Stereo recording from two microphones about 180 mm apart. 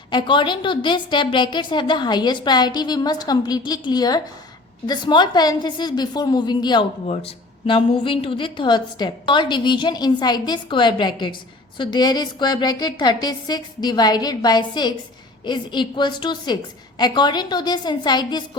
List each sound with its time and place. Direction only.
0.1 s a woman's voice: 25° left (ahead or behind)